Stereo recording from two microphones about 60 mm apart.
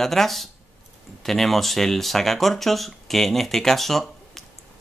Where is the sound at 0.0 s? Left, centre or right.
Centre.